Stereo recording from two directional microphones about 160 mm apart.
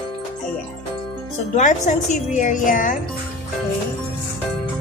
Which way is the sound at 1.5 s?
45° left (ahead or behind).